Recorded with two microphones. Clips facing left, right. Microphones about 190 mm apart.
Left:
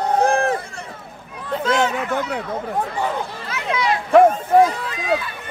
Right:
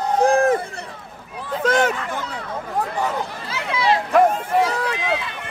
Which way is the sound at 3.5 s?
30° right (ahead or behind).